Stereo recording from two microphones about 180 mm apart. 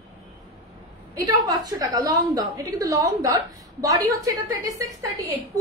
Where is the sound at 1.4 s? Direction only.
20° right (ahead or behind).